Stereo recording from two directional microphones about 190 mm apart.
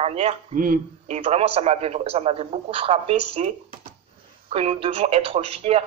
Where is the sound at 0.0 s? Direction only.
35° right (ahead or behind).